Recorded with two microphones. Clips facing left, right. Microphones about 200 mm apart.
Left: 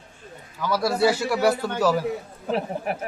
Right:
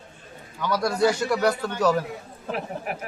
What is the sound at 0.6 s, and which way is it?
A man's voice, 5° left (ahead or behind).